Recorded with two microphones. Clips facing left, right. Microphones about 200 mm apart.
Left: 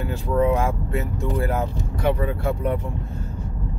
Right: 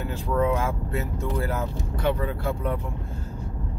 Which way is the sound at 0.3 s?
15° left (ahead or behind).